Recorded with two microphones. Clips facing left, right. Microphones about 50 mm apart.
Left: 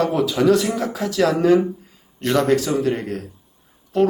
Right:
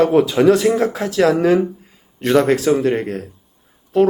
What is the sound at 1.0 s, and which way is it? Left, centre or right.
Speech, right.